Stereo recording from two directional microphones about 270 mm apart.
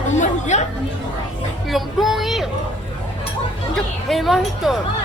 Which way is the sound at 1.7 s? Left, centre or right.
Centre.